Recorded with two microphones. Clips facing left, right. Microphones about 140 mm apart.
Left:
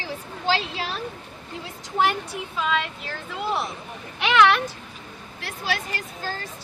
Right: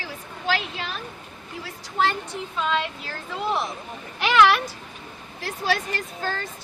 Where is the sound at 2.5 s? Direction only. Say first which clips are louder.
Even; centre (ahead or behind).